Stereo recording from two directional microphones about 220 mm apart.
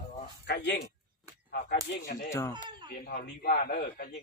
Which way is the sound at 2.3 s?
15° left (ahead or behind).